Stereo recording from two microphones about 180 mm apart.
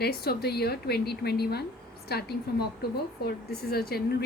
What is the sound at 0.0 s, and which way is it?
A woman's voice, 65° left (ahead or behind).